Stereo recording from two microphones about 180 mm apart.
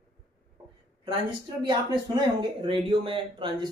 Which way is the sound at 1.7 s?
30° right (ahead or behind).